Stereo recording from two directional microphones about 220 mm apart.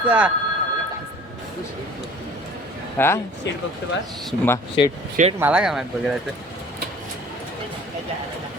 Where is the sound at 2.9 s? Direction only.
10° left (ahead or behind).